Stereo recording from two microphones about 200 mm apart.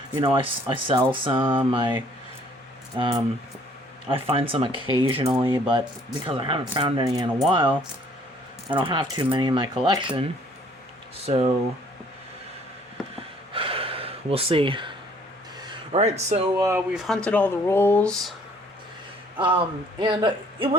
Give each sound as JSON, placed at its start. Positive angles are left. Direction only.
{"t": 0.2, "sound": "speech", "side_deg": -25}
{"t": 4.1, "sound": "speech", "side_deg": -30}
{"t": 8.7, "sound": "speech", "side_deg": -25}
{"t": 11.3, "sound": "speech", "side_deg": -30}
{"t": 13.5, "sound": "gasp", "side_deg": -25}
{"t": 15.6, "sound": "a sound", "side_deg": -25}
{"t": 16.6, "sound": "speech", "side_deg": -15}
{"t": 16.9, "sound": "speech", "side_deg": 0}
{"t": 19.4, "sound": "speech", "side_deg": -25}